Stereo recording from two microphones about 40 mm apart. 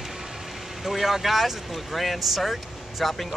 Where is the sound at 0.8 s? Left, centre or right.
Centre.